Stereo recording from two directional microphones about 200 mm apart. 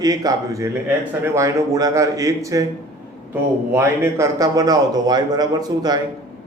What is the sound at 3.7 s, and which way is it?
A man's voice, 10° right (ahead or behind).